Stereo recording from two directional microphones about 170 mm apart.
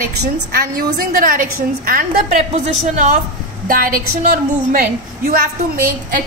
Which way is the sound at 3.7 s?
55° right (ahead or behind).